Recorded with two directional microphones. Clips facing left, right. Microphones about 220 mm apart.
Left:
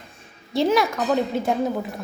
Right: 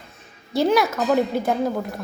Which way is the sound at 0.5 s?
Centre (ahead or behind).